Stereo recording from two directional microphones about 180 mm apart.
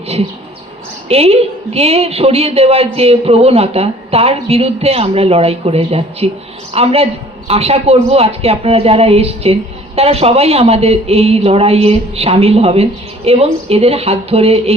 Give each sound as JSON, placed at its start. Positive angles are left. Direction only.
{"t": 1.0, "sound": "a man's voice", "side_deg": -35}